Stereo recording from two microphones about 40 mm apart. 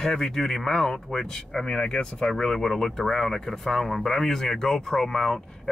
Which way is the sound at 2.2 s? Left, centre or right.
Centre.